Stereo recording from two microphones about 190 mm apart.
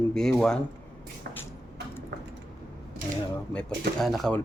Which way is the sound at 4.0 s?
Centre (ahead or behind).